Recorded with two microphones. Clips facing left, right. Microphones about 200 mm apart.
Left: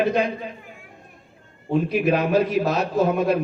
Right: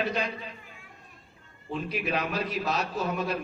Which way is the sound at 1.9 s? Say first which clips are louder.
Left 9 dB; 50° left (ahead or behind).